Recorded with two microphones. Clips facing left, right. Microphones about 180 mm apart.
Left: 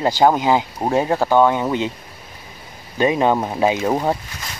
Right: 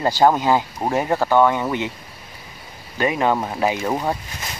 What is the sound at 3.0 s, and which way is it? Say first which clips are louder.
Speech: left 3 dB; 20° left (ahead or behind).